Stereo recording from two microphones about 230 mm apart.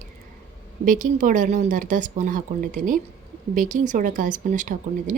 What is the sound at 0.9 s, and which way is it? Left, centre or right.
Speech, right.